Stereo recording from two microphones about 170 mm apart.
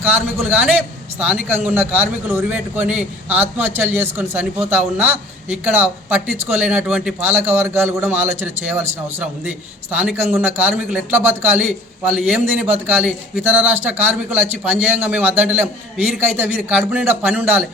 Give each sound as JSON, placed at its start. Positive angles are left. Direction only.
{"t": 0.3, "sound": "speech", "side_deg": -10}